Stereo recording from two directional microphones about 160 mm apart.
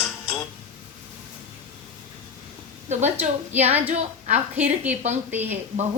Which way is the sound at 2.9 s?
45° right (ahead or behind).